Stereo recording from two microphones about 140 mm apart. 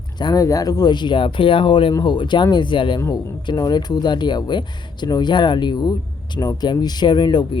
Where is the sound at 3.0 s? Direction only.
20° left (ahead or behind).